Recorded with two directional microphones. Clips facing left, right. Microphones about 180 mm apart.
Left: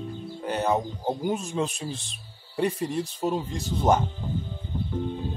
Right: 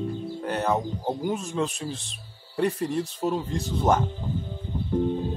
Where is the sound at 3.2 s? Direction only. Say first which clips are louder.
Even; 5° left (ahead or behind).